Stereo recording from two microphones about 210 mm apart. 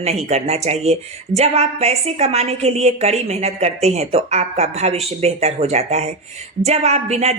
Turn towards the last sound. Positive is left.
turn(degrees=-30)  # may be behind; listen again after turning